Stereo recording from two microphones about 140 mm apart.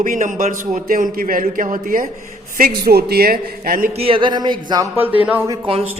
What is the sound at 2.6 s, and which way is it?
A man's voice, 90° right.